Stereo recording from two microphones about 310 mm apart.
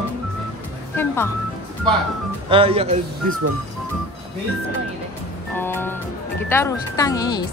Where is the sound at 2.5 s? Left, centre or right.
Centre.